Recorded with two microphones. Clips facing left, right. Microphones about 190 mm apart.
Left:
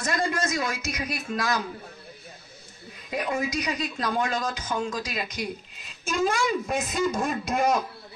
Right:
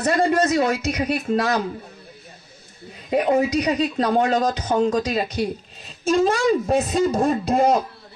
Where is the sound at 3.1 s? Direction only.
35° right (ahead or behind).